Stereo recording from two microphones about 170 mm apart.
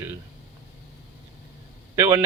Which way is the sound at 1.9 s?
15° right (ahead or behind).